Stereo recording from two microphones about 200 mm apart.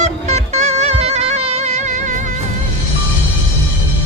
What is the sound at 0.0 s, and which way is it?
Music, 35° right (ahead or behind).